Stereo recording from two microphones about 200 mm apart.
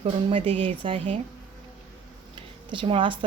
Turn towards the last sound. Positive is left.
turn(degrees=-25)  # may be behind; listen again after turning